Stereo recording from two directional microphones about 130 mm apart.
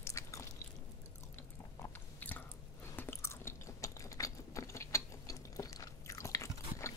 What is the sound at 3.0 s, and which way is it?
Chewing, 20° left (ahead or behind).